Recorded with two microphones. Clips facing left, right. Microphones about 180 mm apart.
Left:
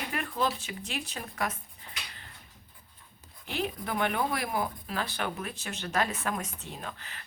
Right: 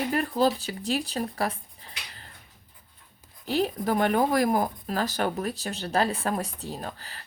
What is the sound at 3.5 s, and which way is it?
Speech, 40° right (ahead or behind).